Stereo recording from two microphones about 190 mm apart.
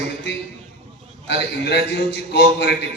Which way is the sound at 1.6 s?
65° left (ahead or behind).